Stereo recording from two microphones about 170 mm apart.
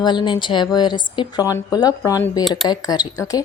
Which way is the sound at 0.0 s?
25° left (ahead or behind).